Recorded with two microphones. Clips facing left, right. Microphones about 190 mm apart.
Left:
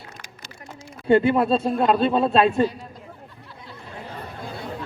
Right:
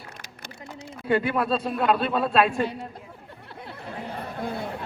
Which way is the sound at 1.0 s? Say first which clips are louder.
Left 6 dB; 25° left (ahead or behind).